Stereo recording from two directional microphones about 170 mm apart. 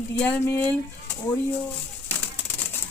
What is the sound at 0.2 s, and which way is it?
Speech, 10° left (ahead or behind).